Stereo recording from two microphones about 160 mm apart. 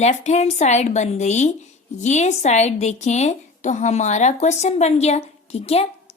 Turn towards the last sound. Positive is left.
turn(degrees=40)  # may be behind; listen again after turning